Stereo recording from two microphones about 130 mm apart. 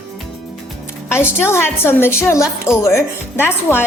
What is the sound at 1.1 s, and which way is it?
A woman's voice, 20° left (ahead or behind).